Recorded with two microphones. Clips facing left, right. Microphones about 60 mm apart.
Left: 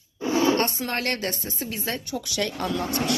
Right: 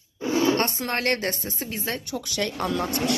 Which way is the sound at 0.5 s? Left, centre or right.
Right.